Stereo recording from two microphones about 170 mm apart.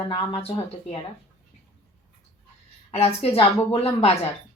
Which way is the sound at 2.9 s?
40° left (ahead or behind).